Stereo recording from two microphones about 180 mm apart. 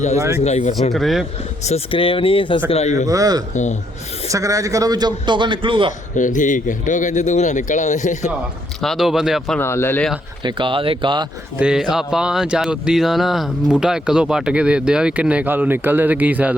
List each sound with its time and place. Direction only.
0.4 s speech: 35° left (ahead or behind)
0.9 s speech: centre (ahead or behind)
1.6 s speech: 35° left (ahead or behind)
3.1 s a man's voice: 20° right (ahead or behind)
3.5 s speech: 40° left (ahead or behind)
4.3 s a man's voice: 20° right (ahead or behind)
6.1 s speech: 45° left (ahead or behind)
8.8 s speech: centre (ahead or behind)
9.6 s speech: 15° left (ahead or behind)
10.4 s a man's voice: 30° right (ahead or behind)
11.6 s speech: 5° right (ahead or behind)